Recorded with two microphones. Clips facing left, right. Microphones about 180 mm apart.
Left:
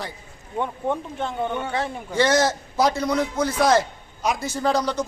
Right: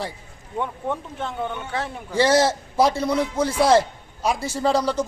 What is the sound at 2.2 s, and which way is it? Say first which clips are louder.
A man's voice: right 2 dB; 30° right (ahead or behind).